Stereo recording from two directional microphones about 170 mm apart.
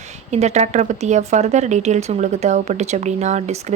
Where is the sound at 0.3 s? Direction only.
40° right (ahead or behind).